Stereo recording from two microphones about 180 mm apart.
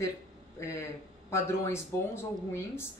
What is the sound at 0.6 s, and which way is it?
A woman's voice, 15° left (ahead or behind).